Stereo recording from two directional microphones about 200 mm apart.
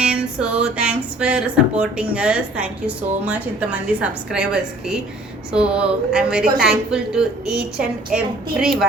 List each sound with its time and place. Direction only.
0.0 s music: 5° right (ahead or behind)